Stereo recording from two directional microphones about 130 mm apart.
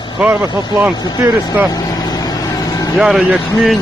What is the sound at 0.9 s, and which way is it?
Speech, 30° left (ahead or behind).